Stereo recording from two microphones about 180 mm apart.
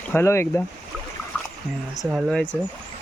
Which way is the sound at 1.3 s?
5° left (ahead or behind).